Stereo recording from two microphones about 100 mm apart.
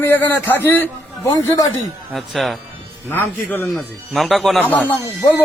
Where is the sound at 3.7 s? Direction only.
Centre (ahead or behind).